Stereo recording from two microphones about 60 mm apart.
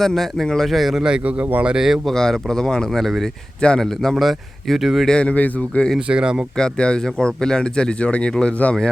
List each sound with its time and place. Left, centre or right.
0.0 s a man's voice: centre
1.0 s a man's voice: centre
1.6 s speech: centre
2.0 s a man's voice: centre
5.0 s speech: centre
6.1 s speech: centre
6.6 s speech: centre